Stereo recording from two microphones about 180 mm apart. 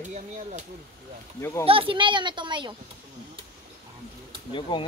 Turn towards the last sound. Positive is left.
turn(degrees=25)  # may be behind; listen again after turning